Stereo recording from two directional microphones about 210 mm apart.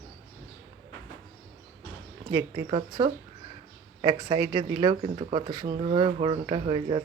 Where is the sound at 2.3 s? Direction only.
20° right (ahead or behind).